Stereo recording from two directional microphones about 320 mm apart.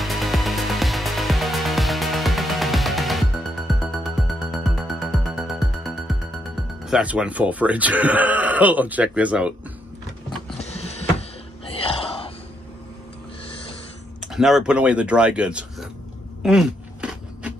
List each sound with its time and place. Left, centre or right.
0.0 s music: centre
6.9 s speech: centre
10.6 s a sound: centre
11.7 s whispering: centre
14.2 s speech: centre
16.4 s a sound: centre